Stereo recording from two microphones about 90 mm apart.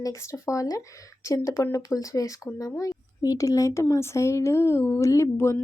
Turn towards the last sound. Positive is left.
turn(degrees=35)  # may be behind; listen again after turning